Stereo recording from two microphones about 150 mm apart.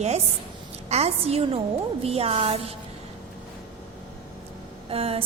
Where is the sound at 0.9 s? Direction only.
45° right (ahead or behind).